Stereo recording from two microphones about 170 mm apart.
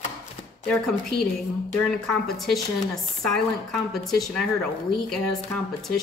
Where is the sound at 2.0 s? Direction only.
Centre (ahead or behind).